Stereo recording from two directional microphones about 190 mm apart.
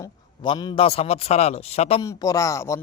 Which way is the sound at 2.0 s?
20° left (ahead or behind).